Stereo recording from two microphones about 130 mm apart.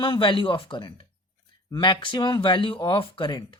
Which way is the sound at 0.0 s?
40° left (ahead or behind).